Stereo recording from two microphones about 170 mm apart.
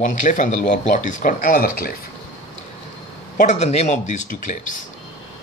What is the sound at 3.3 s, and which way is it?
Speech, 45° left (ahead or behind).